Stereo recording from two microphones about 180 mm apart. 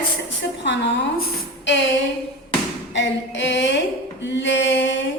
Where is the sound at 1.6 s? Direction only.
80° left.